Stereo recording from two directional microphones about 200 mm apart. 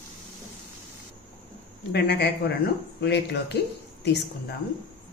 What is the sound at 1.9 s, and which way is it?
Speech, 55° left (ahead or behind).